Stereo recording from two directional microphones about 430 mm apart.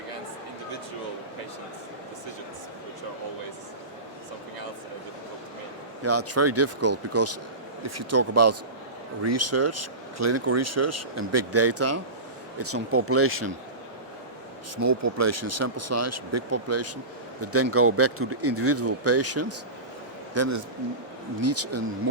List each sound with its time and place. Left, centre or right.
6.0 s speech: right
14.8 s a man's voice: right